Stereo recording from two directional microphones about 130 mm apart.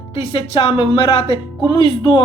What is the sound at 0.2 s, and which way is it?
Speech, 45° left (ahead or behind).